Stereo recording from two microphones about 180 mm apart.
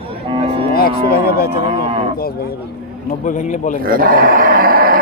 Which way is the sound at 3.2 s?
45° left (ahead or behind).